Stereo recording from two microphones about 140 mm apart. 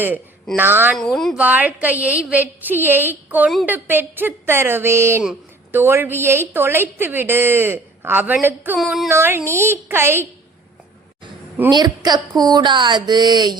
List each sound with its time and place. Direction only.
0.5 s a woman's voice: 15° right (ahead or behind)
0.9 s a woman's voice: 5° left (ahead or behind)
1.4 s a woman's voice: 10° right (ahead or behind)
8.8 s a woman's voice: centre (ahead or behind)
9.0 s a woman's voice: 15° right (ahead or behind)
11.7 s a woman's voice: 30° right (ahead or behind)